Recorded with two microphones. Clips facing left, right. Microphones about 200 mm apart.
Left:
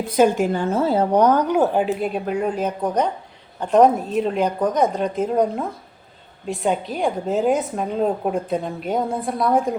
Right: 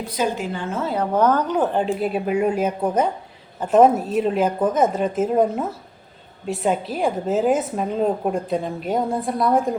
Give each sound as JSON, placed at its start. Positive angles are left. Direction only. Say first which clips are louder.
{"t": 0.1, "sound": "a woman's voice", "louder": "left 8 dB", "side_deg": 50}
{"t": 1.1, "sound": "a woman's voice", "louder": "even", "side_deg": 15}